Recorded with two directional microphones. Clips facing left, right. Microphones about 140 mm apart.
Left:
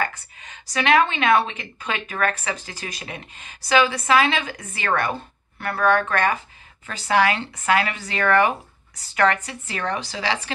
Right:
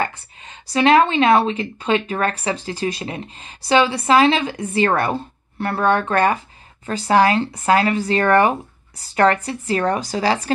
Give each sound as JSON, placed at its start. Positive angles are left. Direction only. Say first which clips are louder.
{"t": 0.0, "sound": "speech", "louder": "right 3 dB", "side_deg": -30}